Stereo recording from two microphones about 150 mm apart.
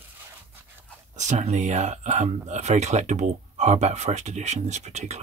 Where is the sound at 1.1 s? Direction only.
50° right (ahead or behind).